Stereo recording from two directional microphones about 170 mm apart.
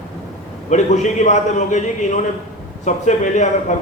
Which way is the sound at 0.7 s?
45° left (ahead or behind).